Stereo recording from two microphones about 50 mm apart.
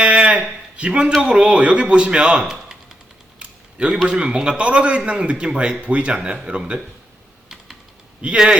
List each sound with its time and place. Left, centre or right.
0.0 s a sound: right
0.8 s a man's voice: right
3.3 s typing: right
3.9 s a man's voice: centre
7.4 s typing: centre
8.2 s a man's voice: right